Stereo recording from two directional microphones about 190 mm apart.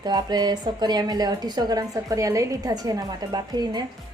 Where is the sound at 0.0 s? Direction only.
20° right (ahead or behind).